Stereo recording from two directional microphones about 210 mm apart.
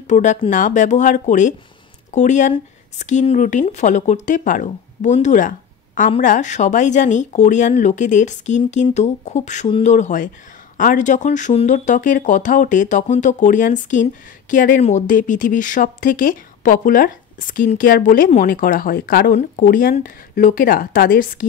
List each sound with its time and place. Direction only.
0.0 s speech: 35° left (ahead or behind)